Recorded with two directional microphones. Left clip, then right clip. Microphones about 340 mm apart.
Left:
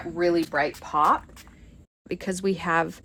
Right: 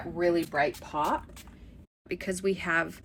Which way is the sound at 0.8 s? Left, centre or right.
Centre.